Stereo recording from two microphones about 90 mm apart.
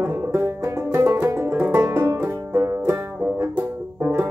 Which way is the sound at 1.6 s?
25° right (ahead or behind).